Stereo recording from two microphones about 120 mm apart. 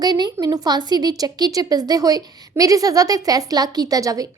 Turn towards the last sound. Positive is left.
turn(degrees=-30)  # may be behind; listen again after turning